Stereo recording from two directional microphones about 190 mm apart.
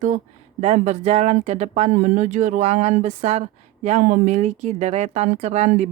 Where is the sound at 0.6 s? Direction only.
35° right (ahead or behind).